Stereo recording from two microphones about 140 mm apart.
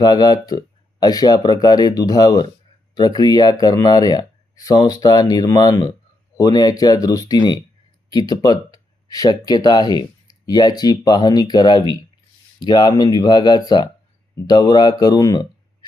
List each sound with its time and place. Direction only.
0.0 s speech: 30° left (ahead or behind)